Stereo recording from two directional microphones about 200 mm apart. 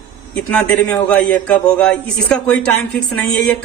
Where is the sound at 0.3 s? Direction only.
5° left (ahead or behind).